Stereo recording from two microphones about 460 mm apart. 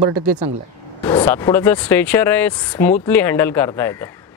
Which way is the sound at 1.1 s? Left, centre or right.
Centre.